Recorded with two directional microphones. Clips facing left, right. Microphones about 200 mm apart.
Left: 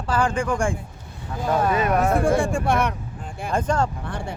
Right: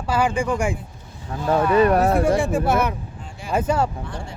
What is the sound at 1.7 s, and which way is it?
Speech, 35° right (ahead or behind).